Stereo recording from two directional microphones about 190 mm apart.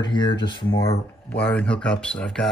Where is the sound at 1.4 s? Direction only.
5° left (ahead or behind).